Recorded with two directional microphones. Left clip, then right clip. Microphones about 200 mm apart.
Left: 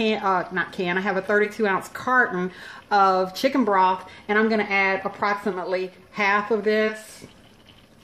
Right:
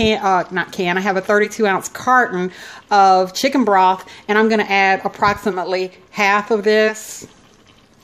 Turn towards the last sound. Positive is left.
turn(degrees=-40)  # may be behind; listen again after turning